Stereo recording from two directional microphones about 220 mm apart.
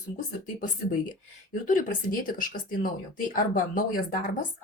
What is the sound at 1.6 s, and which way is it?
Speech, 40° left (ahead or behind).